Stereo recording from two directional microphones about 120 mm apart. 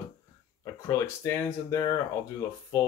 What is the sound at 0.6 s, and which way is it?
Speech, 25° left (ahead or behind).